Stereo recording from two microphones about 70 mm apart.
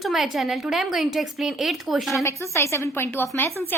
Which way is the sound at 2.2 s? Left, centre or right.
Left.